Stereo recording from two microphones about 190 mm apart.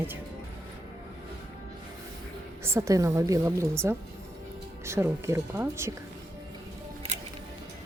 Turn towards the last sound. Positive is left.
turn(degrees=-35)  # may be behind; listen again after turning